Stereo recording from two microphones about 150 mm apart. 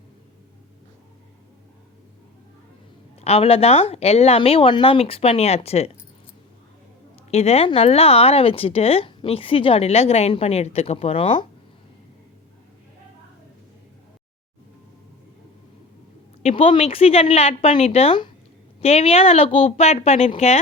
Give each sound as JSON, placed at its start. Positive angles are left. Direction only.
{"t": 3.2, "sound": "speech", "side_deg": 40}
{"t": 7.3, "sound": "speech", "side_deg": 45}
{"t": 16.4, "sound": "speech", "side_deg": 40}